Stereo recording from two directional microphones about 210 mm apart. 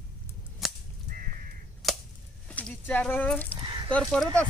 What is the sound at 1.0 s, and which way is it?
Crow, 40° right (ahead or behind).